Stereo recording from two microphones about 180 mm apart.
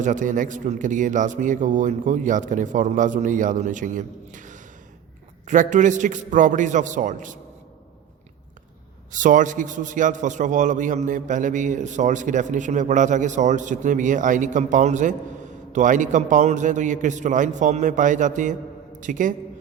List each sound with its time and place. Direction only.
0.0 s a man's voice: 45° right (ahead or behind)
9.1 s a man's voice: 45° right (ahead or behind)